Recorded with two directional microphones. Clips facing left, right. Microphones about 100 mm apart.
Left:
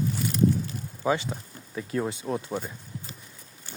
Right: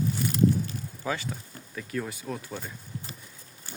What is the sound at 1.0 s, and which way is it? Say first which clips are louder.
Speech: left 7 dB; 20° left (ahead or behind).